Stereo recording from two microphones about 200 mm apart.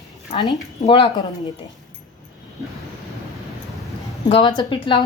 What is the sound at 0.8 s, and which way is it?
Speech, 20° left (ahead or behind).